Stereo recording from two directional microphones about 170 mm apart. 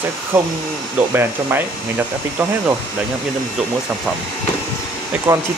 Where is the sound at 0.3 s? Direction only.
10° right (ahead or behind).